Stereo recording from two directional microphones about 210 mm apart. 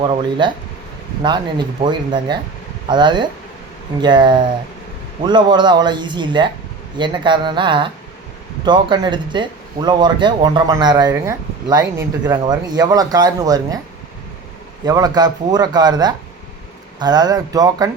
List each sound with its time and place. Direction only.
0.0 s speech: 20° right (ahead or behind)
14.8 s speech: 20° right (ahead or behind)